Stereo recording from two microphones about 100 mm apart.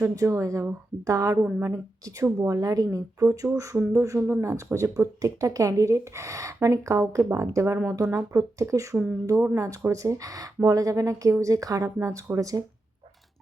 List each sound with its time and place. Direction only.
0.0 s speech: 30° right (ahead or behind)